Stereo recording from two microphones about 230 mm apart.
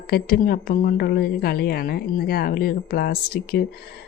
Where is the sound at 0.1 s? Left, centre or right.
Left.